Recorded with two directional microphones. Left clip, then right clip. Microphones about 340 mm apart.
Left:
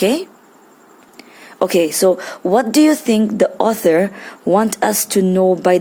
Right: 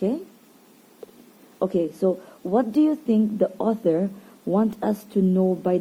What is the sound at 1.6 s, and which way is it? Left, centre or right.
Speech, left.